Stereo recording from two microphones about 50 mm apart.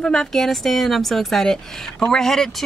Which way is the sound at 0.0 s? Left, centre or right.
Centre.